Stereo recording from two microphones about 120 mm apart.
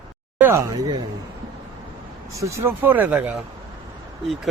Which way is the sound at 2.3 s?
25° right (ahead or behind).